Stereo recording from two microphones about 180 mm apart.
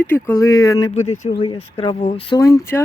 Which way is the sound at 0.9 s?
40° left (ahead or behind).